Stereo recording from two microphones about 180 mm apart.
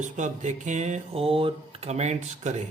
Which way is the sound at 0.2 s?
40° right (ahead or behind).